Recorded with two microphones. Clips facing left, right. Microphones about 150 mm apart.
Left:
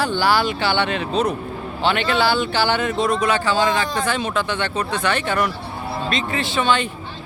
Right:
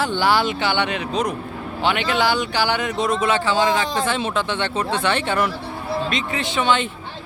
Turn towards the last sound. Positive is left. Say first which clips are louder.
# even
turn(degrees=-20)  # may be behind; listen again after turning